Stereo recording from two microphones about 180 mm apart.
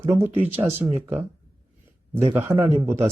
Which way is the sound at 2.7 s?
35° right (ahead or behind).